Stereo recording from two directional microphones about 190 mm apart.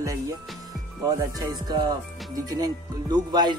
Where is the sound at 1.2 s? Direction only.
20° right (ahead or behind).